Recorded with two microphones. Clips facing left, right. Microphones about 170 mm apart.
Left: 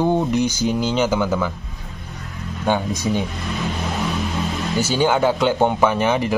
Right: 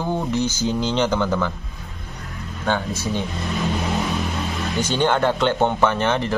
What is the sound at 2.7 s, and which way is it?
Speech, 15° left (ahead or behind).